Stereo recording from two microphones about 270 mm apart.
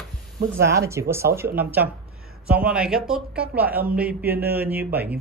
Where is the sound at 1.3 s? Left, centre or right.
Right.